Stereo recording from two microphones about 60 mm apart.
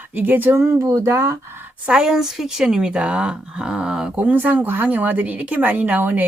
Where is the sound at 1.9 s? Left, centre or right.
Centre.